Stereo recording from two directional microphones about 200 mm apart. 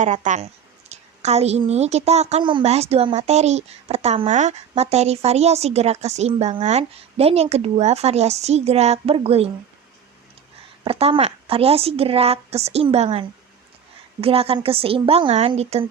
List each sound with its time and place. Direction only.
0.0 s a woman's voice: 40° right (ahead or behind)
10.8 s a woman's voice: 30° right (ahead or behind)